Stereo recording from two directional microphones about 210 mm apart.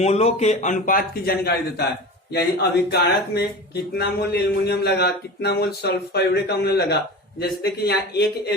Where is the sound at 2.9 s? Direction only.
50° left (ahead or behind).